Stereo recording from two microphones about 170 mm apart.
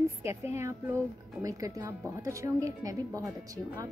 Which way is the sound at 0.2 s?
15° right (ahead or behind).